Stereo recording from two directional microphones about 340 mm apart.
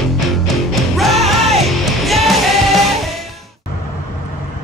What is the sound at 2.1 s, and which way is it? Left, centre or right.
Music, centre.